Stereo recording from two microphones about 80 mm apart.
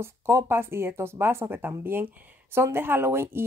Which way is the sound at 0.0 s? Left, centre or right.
Right.